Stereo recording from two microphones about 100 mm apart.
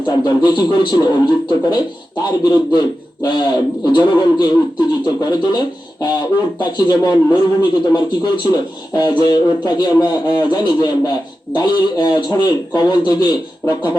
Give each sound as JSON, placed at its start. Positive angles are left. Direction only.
{"t": 0.0, "sound": "speech", "side_deg": 45}